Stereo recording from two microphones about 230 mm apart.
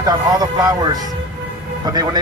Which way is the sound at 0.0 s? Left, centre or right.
Centre.